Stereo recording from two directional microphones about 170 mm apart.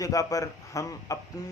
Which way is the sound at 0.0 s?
20° left (ahead or behind).